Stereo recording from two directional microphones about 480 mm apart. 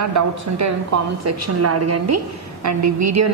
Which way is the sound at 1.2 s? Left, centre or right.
Right.